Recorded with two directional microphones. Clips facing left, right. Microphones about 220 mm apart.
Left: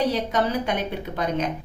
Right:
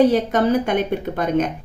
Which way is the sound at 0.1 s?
50° right (ahead or behind).